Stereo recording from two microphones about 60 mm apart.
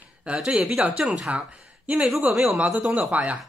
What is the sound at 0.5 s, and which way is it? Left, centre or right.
Speech, right.